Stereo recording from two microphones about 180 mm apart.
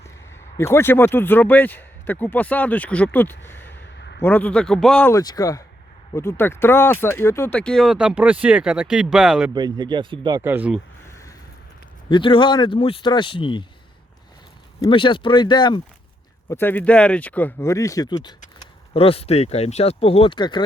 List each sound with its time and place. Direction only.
0.5 s speech: 15° left (ahead or behind)
3.9 s a sound: 70° left (ahead or behind)
4.2 s speech: 10° left (ahead or behind)
5.1 s speech: 20° left (ahead or behind); by 9.5 s 5° right (ahead or behind)
9.6 s speech: 25° right (ahead or behind)
10.4 s speech: 10° right (ahead or behind)
12.0 s speech: 25° left (ahead or behind)
14.8 s speech: 25° left (ahead or behind)
16.5 s speech: 10° left (ahead or behind)
18.9 s speech: 30° left (ahead or behind)